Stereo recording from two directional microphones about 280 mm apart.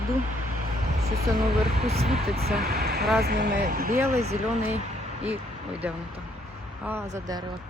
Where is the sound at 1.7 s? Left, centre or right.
Right.